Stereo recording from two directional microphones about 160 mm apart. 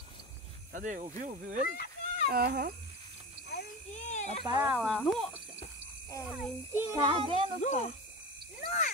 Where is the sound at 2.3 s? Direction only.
75° right (ahead or behind).